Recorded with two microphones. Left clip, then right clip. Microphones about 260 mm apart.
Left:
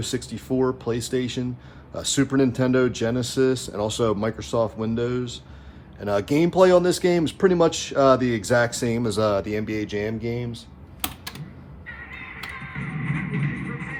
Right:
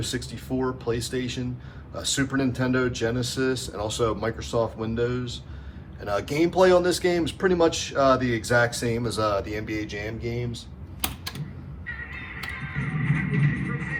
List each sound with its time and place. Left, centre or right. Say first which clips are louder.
0.0 s speech: left 2 dB; left
12.8 s music: right 2 dB; centre